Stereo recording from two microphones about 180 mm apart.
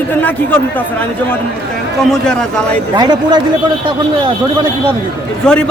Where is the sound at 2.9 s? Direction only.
25° right (ahead or behind).